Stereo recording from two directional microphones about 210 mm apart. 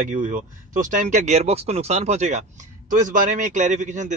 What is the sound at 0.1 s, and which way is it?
A man's voice, 35° right (ahead or behind).